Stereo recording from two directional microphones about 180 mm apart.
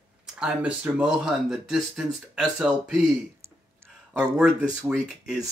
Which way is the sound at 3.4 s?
10° right (ahead or behind).